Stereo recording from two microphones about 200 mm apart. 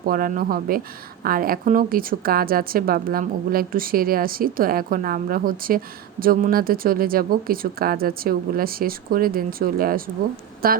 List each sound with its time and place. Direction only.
0.1 s a woman's voice: 45° right (ahead or behind)